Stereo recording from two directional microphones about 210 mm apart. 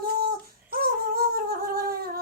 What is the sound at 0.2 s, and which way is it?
Humming, 45° right (ahead or behind).